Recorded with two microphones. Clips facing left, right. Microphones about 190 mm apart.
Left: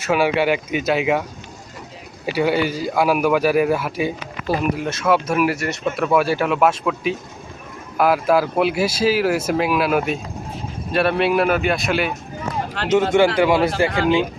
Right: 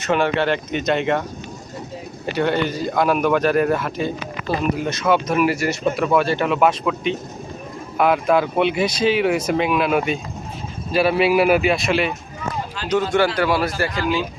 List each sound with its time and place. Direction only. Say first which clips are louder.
0.0 s a man's voice: left 1 dB; 10° left (ahead or behind)
2.2 s a man's voice: left 1 dB; 5° left (ahead or behind)
12.9 s a man's voice: left 3 dB; 25° left (ahead or behind)